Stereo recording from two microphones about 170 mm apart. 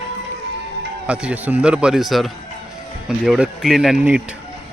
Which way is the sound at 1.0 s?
5° right (ahead or behind).